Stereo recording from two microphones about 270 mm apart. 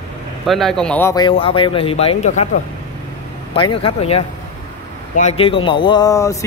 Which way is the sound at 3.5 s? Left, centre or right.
Centre.